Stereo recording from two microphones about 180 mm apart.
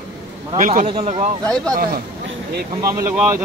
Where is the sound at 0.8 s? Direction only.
35° right (ahead or behind).